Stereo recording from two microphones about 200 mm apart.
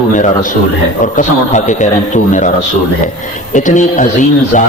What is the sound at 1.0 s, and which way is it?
A man's voice, 40° left (ahead or behind).